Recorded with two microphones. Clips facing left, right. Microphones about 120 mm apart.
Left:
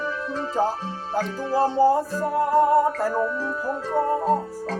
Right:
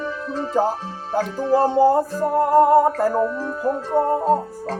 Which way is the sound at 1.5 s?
50° right (ahead or behind).